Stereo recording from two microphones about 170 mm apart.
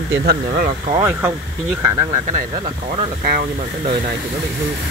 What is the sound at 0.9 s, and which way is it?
Speech, 15° right (ahead or behind).